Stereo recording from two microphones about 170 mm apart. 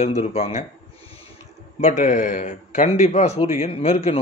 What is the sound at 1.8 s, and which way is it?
Speech, 45° left (ahead or behind).